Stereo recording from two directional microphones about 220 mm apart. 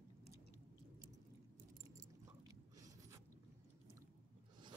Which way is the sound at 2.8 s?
15° right (ahead or behind).